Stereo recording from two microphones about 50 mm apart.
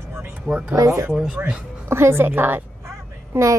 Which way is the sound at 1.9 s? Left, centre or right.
Right.